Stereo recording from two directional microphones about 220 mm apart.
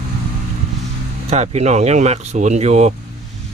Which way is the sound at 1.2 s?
30° right (ahead or behind).